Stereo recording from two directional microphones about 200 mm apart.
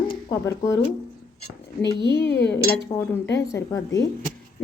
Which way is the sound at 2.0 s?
60° left (ahead or behind).